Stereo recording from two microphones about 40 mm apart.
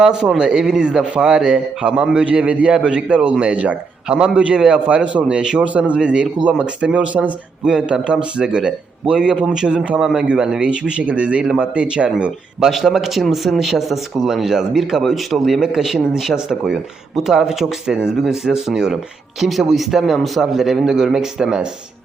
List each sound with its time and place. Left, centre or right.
0.0 s a man's voice: centre
5.4 s a man's voice: centre
5.6 s speech: right
7.6 s a man's voice: right
10.2 s a man's voice: centre
12.7 s speech: centre